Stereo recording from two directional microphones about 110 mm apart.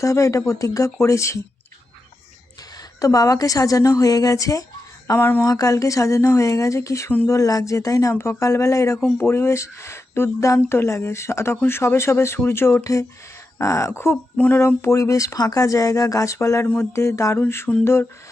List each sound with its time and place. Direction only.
0.0 s speech: 30° left (ahead or behind)
2.7 s a woman's voice: 35° left (ahead or behind); by 5.5 s 20° left (ahead or behind)
5.5 s speech: 30° left (ahead or behind)